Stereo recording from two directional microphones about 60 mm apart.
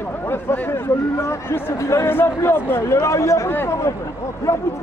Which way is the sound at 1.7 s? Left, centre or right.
Left.